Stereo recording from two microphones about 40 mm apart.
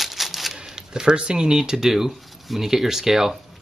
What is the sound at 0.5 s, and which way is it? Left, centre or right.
Speech, centre.